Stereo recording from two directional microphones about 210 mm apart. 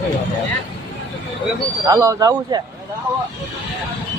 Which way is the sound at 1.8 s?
15° right (ahead or behind).